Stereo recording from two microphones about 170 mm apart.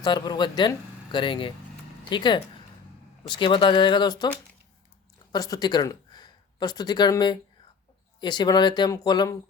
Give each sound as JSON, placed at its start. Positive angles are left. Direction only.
{"t": 0.0, "sound": "speech", "side_deg": 25}
{"t": 5.3, "sound": "speech", "side_deg": 25}